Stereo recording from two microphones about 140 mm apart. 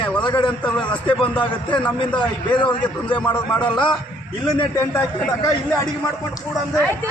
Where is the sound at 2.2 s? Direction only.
35° left (ahead or behind).